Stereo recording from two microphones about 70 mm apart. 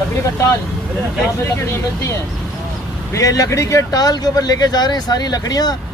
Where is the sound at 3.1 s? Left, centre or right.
Left.